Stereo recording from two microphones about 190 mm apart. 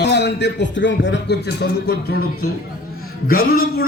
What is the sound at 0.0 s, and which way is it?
A man's voice, 65° left (ahead or behind).